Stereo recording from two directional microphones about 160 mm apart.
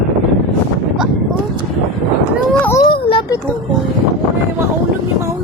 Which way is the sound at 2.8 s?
35° left (ahead or behind).